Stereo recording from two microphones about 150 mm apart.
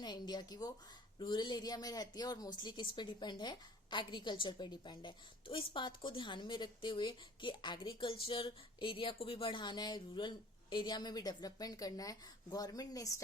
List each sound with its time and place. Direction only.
0.0 s a woman's voice: 30° left (ahead or behind)